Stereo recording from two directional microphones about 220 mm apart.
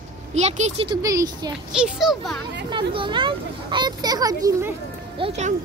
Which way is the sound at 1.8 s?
Centre (ahead or behind).